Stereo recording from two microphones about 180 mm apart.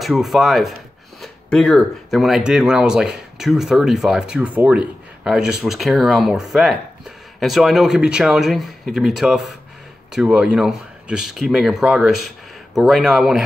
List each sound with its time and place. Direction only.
0.0 s speech: centre (ahead or behind)